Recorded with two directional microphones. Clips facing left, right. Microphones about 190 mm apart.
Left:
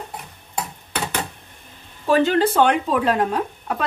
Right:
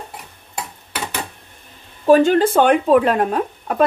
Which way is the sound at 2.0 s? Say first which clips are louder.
Right 5 dB; 50° right (ahead or behind).